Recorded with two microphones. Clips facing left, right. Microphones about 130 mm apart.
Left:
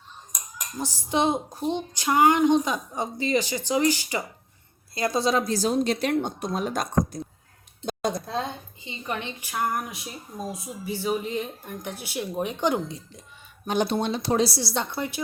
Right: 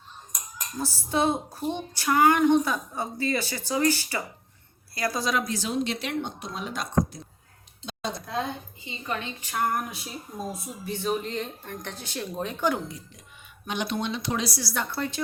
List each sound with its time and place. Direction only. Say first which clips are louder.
0.8 s a woman's voice: left 1 dB; 15° left (ahead or behind); by 7.2 s 45° left (ahead or behind)
7.9 s a sound: left 6 dB; 45° left (ahead or behind)
8.8 s speech: left 2 dB; 20° left (ahead or behind)
13.7 s a woman's voice: left 5 dB; 35° left (ahead or behind); by 15.2 s 15° left (ahead or behind)